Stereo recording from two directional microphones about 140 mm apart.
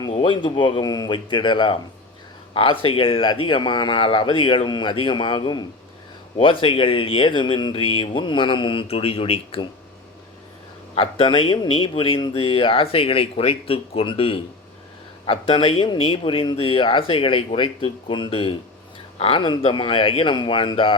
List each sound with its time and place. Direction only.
0.2 s speech: 35° left (ahead or behind)
10.9 s speech: 40° left (ahead or behind)